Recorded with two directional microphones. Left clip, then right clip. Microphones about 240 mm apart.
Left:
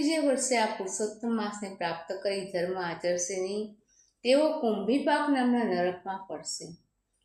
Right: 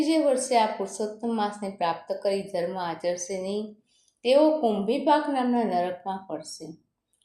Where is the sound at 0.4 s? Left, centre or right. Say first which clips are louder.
Right 5 dB; right.